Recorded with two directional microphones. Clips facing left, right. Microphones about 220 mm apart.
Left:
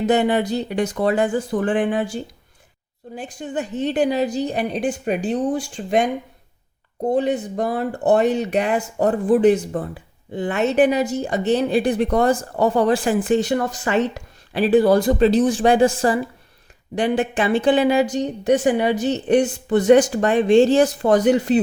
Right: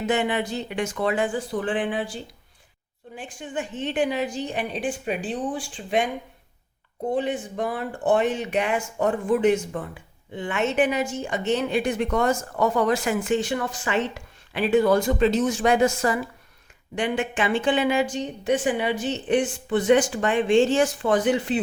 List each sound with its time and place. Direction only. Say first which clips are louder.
0.1 s speech: left 5 dB; 40° left (ahead or behind)
7.1 s speech: left 6 dB; 40° left (ahead or behind)